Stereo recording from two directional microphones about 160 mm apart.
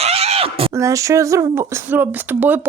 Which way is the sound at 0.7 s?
20° right (ahead or behind).